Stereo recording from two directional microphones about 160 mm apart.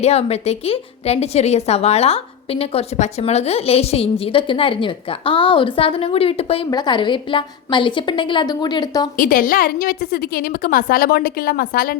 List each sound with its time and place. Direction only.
0.0 s a woman's voice: 40° left (ahead or behind)
6.7 s a woman's voice: 25° left (ahead or behind)
9.1 s a woman's voice: 60° left (ahead or behind)